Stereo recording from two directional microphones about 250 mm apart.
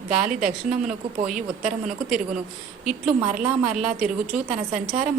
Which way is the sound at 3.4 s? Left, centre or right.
Centre.